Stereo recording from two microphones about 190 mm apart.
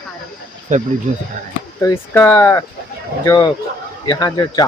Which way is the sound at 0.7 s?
40° right (ahead or behind).